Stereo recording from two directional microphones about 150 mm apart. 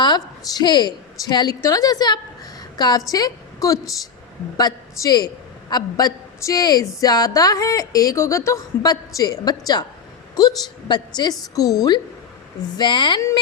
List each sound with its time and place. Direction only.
0.6 s a woman's voice: 30° left (ahead or behind)